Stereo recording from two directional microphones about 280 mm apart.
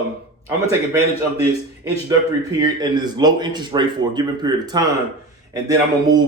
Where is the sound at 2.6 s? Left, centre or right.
Centre.